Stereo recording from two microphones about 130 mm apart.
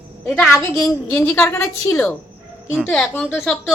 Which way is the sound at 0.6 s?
15° left (ahead or behind).